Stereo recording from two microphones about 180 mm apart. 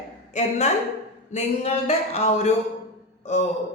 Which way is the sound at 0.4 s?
40° left (ahead or behind).